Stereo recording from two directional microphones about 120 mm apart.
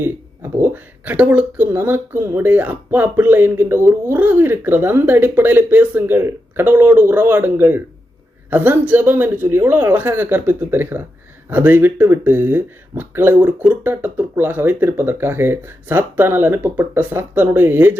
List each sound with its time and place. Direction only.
0.6 s speech: 15° right (ahead or behind)